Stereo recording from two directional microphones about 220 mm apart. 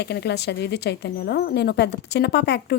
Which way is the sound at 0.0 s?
50° left (ahead or behind).